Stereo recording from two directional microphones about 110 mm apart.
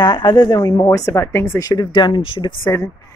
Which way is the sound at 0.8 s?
30° left (ahead or behind).